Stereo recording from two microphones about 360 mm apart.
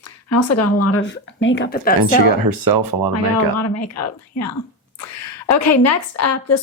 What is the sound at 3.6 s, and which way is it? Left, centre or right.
A woman's voice, left.